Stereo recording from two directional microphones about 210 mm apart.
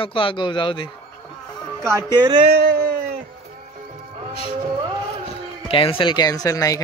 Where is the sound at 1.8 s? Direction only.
15° right (ahead or behind).